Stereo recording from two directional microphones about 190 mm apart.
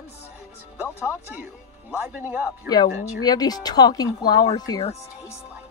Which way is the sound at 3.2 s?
20° left (ahead or behind).